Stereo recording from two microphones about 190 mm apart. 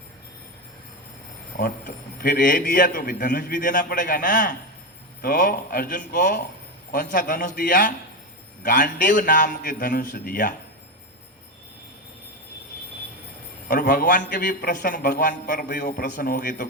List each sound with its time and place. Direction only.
1.5 s a man's voice: 40° left (ahead or behind)
13.7 s a man's voice: 45° left (ahead or behind)